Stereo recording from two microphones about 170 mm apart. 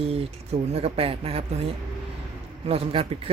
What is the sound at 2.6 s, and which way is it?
Speech, 35° right (ahead or behind).